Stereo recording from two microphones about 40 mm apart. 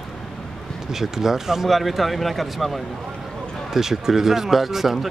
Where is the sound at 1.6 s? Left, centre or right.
Centre.